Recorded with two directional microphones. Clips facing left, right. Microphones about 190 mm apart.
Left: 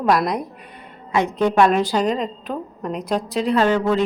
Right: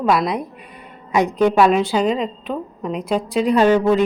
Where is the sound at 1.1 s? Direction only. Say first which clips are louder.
Right 2 dB; 15° right (ahead or behind).